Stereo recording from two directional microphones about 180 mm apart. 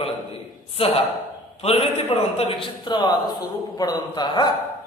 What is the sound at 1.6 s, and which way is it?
A man's voice, 35° left (ahead or behind).